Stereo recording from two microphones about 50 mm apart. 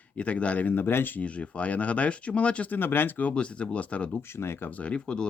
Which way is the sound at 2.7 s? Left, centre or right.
Left.